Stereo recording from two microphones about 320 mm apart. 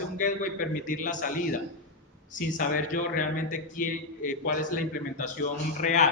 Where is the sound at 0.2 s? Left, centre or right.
Left.